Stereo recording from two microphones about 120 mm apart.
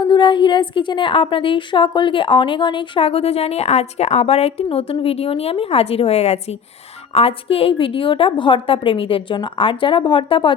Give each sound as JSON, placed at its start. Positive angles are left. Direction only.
{"t": 0.0, "sound": "a woman's voice", "side_deg": 40}